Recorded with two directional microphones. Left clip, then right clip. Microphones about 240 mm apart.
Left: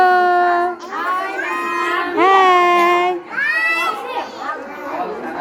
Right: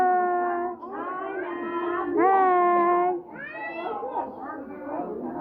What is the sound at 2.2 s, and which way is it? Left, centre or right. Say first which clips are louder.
Music: left 8 dB; left.